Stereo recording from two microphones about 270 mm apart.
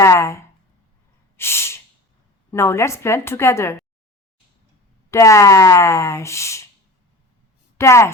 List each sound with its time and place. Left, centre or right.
0.0 s a sound: centre
1.4 s snort: centre
2.5 s speech: centre
5.1 s speech: centre
7.8 s speech: centre